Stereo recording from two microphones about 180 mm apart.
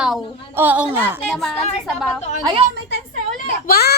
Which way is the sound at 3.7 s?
60° left (ahead or behind).